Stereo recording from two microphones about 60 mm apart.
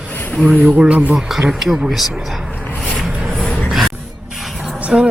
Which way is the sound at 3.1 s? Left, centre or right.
Centre.